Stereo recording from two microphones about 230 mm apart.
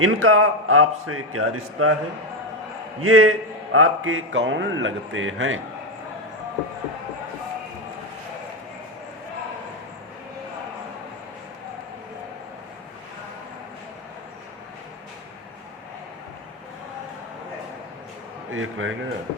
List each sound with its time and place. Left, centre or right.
0.0 s a man's voice: right
3.0 s a man's voice: right
18.5 s a man's voice: right